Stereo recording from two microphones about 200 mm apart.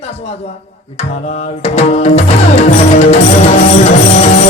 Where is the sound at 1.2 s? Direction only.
30° left (ahead or behind).